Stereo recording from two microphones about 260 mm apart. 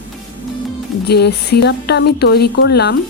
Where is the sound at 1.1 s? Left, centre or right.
Left.